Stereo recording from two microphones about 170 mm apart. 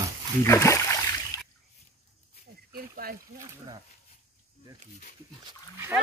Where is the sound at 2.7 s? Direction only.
60° right (ahead or behind).